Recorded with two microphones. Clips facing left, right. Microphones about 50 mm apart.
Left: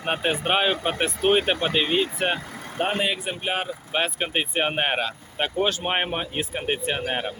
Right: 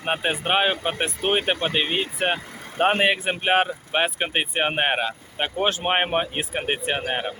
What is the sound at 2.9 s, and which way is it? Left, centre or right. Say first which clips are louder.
Speech: right 4 dB; right.